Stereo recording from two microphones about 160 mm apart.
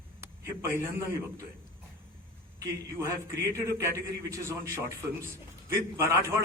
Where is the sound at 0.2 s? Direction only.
15° right (ahead or behind).